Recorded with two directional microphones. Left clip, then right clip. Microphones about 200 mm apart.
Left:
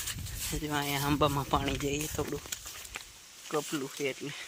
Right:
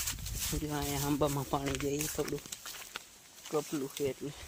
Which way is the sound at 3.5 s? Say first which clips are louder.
Left 1 dB; 15° left (ahead or behind).